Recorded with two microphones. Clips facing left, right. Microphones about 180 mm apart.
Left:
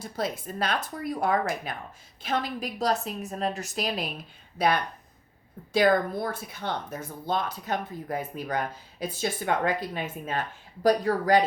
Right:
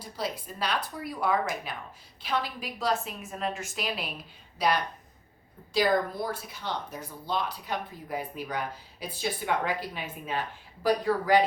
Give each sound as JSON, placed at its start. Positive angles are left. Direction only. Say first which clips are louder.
{"t": 0.0, "sound": "a woman's voice", "louder": "left 3 dB", "side_deg": 50}
{"t": 4.5, "sound": "speech", "louder": "left 2 dB", "side_deg": 55}